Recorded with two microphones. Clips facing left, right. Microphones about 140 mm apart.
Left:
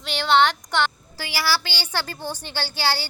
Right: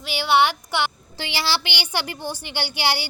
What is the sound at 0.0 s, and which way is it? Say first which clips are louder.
Speech: even; 5° right (ahead or behind).